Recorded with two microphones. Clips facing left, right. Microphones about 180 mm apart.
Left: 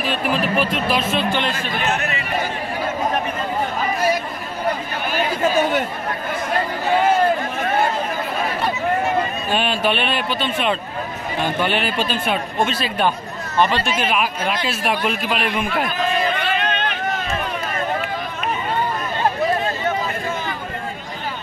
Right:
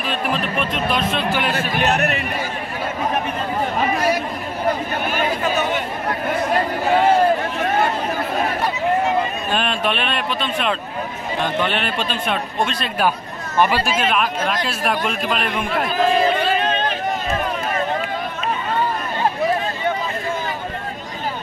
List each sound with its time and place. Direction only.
0.0 s a man's voice: centre (ahead or behind)
2.0 s speech: 60° right (ahead or behind)
9.5 s a man's voice: centre (ahead or behind)
13.6 s speech: 10° right (ahead or behind)
14.0 s a man's voice: 5° left (ahead or behind)
16.0 s a sound: 30° right (ahead or behind)